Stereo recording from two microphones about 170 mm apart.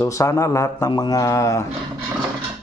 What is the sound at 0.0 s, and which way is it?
Speech, 20° left (ahead or behind).